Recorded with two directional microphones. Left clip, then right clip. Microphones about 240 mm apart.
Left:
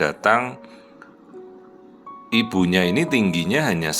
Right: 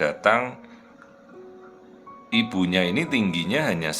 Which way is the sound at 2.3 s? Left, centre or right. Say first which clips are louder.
Left 3 dB; centre.